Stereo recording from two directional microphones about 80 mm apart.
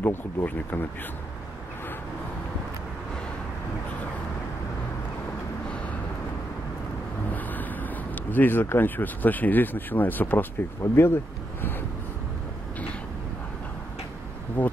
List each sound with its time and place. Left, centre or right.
0.0 s speech: left
8.1 s speech: left
14.6 s speech: left